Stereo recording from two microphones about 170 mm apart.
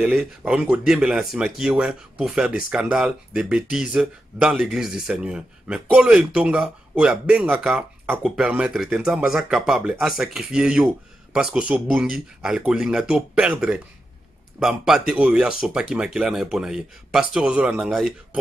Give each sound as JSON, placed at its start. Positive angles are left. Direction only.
{"t": 0.0, "sound": "speech", "side_deg": -5}